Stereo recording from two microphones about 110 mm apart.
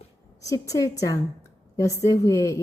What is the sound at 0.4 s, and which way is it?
A woman's voice, 30° left (ahead or behind).